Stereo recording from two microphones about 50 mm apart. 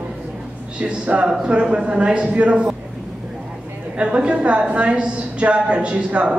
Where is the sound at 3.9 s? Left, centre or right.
Right.